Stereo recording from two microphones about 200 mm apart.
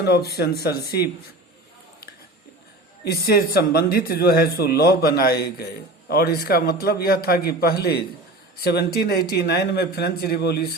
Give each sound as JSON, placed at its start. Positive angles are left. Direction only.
{"t": 0.0, "sound": "speech", "side_deg": 50}
{"t": 3.1, "sound": "speech", "side_deg": 50}